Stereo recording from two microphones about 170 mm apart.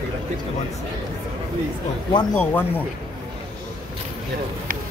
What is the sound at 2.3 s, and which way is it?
Speech, 10° left (ahead or behind).